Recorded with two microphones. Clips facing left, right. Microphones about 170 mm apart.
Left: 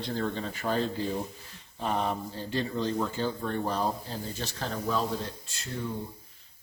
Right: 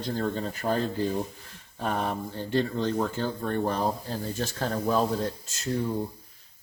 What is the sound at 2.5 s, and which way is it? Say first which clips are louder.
Speech: right 4 dB; 60° right (ahead or behind).